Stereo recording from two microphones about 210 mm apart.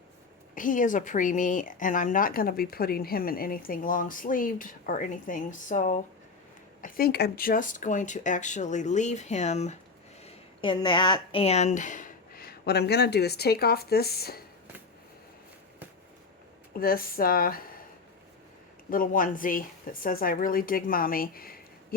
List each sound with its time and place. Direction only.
0.5 s a woman's voice: 40° left (ahead or behind)
16.7 s speech: 45° left (ahead or behind)
18.9 s speech: 40° left (ahead or behind)